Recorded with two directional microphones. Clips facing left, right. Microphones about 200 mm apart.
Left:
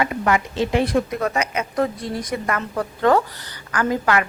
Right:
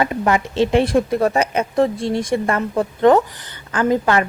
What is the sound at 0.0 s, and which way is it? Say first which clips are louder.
A woman's voice: right 2 dB; 30° right (ahead or behind).